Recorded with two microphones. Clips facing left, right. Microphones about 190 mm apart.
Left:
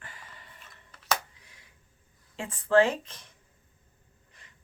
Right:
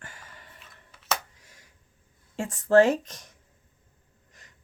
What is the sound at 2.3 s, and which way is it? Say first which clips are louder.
Speech: right 4 dB; 45° right (ahead or behind).